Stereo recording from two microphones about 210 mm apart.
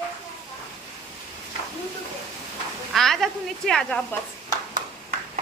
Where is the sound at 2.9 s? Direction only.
Centre (ahead or behind).